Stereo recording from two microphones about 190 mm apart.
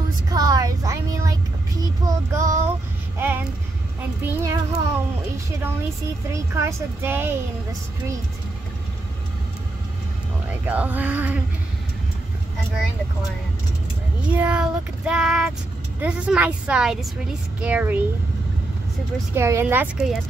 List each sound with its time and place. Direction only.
0.3 s speech: 20° right (ahead or behind)
4.2 s a woman's voice: 15° right (ahead or behind)
6.3 s a woman's voice: 15° right (ahead or behind)
10.6 s a woman's voice: 10° right (ahead or behind)
14.3 s child singing: 10° right (ahead or behind)
17.6 s a woman's voice: 5° right (ahead or behind)
19.3 s a woman's voice: 15° right (ahead or behind)